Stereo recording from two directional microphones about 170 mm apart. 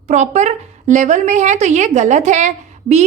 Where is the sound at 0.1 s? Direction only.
40° right (ahead or behind).